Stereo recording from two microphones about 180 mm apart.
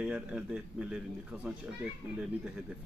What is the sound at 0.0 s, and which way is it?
A man's voice, 5° right (ahead or behind).